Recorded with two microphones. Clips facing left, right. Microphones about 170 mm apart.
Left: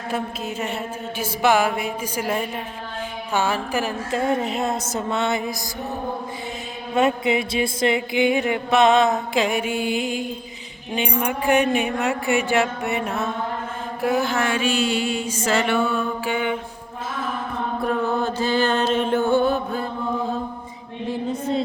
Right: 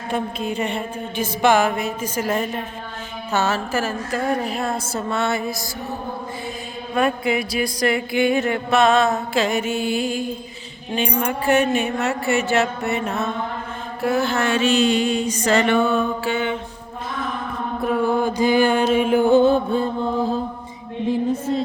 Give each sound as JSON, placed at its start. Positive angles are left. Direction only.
{"t": 0.1, "sound": "mantra", "side_deg": 5}
{"t": 6.9, "sound": "mantra", "side_deg": 25}
{"t": 17.8, "sound": "music", "side_deg": -10}